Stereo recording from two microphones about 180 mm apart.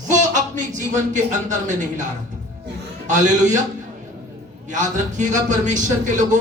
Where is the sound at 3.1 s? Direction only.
45° right (ahead or behind).